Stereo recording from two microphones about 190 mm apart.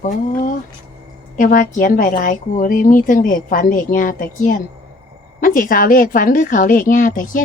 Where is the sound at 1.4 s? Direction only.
45° left (ahead or behind).